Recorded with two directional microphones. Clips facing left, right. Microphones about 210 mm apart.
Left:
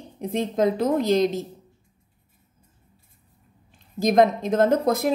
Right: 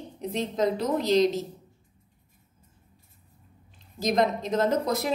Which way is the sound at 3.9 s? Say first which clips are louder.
Left 6 dB; 50° left (ahead or behind).